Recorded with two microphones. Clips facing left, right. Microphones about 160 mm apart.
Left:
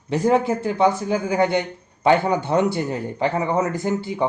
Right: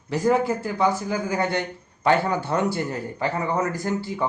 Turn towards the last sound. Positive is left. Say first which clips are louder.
# left 3 dB
turn(degrees=20)  # may be behind; listen again after turning